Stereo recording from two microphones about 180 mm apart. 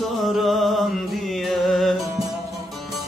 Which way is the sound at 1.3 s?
Centre (ahead or behind).